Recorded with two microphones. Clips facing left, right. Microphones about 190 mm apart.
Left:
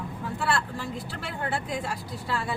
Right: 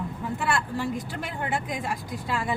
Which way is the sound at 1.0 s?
15° right (ahead or behind).